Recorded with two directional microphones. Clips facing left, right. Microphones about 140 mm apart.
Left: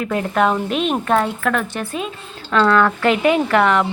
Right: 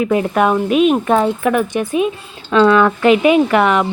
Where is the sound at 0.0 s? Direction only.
15° right (ahead or behind).